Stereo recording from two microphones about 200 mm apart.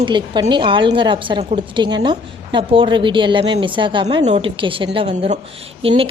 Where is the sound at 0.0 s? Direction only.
25° right (ahead or behind).